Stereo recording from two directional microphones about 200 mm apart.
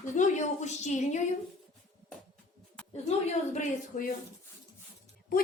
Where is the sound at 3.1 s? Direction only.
35° left (ahead or behind).